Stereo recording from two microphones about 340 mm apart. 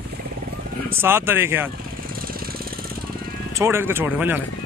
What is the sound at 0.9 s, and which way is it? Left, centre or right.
Speech, centre.